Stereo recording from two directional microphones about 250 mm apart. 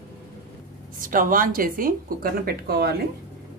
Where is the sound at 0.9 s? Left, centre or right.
Right.